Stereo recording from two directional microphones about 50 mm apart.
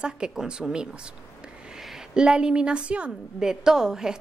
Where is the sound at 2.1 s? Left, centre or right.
Centre.